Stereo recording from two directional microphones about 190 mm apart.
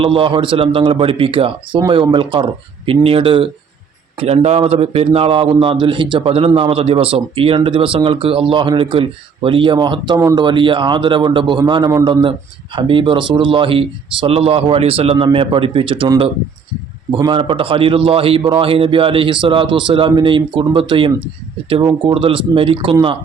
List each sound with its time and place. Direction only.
0.0 s a man's voice: 30° right (ahead or behind)